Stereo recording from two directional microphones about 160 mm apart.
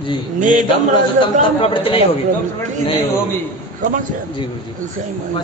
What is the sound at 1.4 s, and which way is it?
Speech, 35° left (ahead or behind).